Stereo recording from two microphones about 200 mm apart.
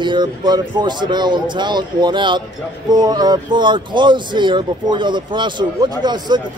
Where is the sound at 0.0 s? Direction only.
20° right (ahead or behind).